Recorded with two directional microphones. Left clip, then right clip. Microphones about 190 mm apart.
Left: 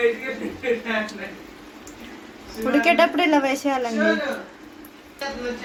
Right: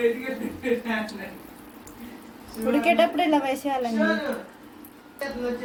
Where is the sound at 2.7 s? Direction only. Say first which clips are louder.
Left 3 dB; 15° left (ahead or behind).